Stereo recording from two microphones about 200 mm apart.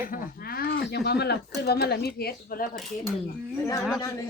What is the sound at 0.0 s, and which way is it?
Speech, 45° left (ahead or behind).